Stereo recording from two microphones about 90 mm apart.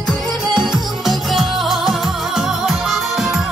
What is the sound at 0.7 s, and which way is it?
Music, 5° right (ahead or behind).